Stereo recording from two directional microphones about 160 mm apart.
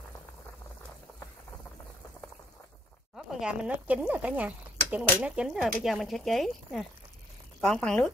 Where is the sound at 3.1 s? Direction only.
5° right (ahead or behind).